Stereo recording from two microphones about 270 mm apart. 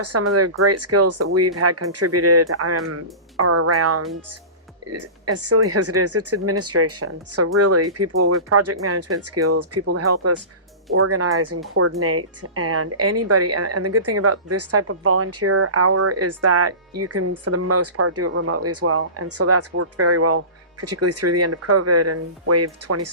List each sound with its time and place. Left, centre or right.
0.0 s speech: right